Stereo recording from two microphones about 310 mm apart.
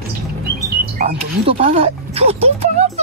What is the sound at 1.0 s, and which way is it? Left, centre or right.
Speech, right.